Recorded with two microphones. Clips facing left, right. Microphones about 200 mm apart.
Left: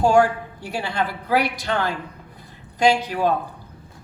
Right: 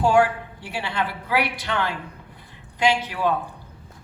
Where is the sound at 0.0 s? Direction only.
40° left (ahead or behind).